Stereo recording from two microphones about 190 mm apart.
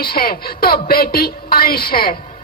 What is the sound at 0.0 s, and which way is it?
A woman's voice, 50° left (ahead or behind).